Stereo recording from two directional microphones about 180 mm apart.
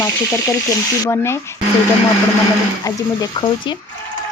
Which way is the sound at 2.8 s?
20° left (ahead or behind).